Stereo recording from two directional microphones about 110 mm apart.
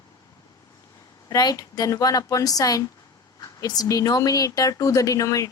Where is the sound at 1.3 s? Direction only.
35° left (ahead or behind).